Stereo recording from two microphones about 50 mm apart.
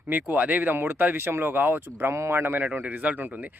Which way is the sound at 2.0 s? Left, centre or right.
Right.